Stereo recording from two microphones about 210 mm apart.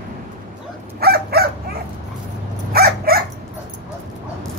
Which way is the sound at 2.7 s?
45° right (ahead or behind).